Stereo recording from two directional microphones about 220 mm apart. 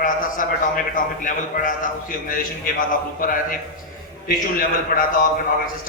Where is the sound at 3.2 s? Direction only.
40° left (ahead or behind).